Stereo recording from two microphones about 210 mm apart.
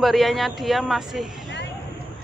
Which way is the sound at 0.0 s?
Centre (ahead or behind).